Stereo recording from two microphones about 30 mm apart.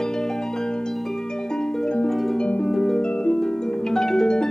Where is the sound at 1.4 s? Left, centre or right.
Left.